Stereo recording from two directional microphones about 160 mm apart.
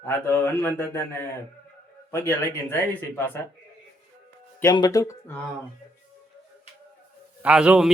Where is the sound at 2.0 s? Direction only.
15° left (ahead or behind).